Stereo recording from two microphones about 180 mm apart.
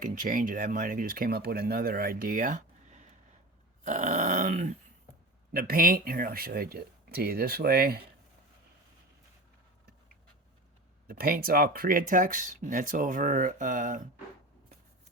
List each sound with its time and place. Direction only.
0.0 s speech: 45° right (ahead or behind)
3.8 s growling: 40° right (ahead or behind)
5.5 s speech: 55° right (ahead or behind)
11.1 s speech: 55° right (ahead or behind)